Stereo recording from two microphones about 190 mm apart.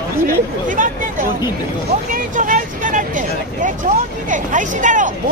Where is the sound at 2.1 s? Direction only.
45° right (ahead or behind).